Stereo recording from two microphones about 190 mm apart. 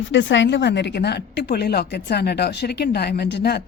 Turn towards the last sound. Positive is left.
turn(degrees=60)  # may be behind; listen again after turning